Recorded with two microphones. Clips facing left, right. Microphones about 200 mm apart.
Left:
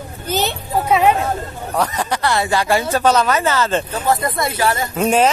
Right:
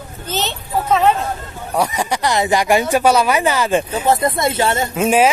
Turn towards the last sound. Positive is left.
turn(degrees=-5)  # may be behind; listen again after turning